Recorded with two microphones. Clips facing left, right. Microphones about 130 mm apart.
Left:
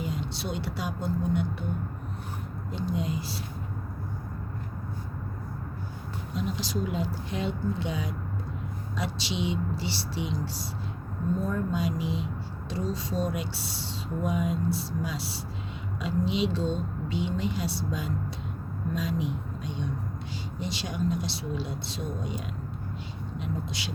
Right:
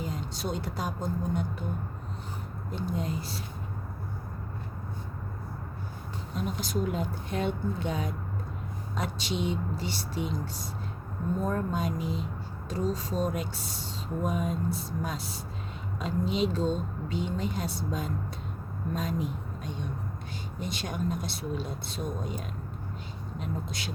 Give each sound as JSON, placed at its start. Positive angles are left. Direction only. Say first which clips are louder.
{"t": 0.0, "sound": "speech", "louder": "left 1 dB", "side_deg": -45}
{"t": 2.7, "sound": "speech", "louder": "left 2 dB", "side_deg": -45}
{"t": 6.3, "sound": "speech", "louder": "even", "side_deg": -50}
{"t": 23.4, "sound": "speech", "louder": "left 1 dB", "side_deg": -45}